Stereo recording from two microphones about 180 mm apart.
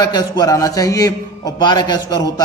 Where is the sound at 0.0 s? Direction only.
25° left (ahead or behind).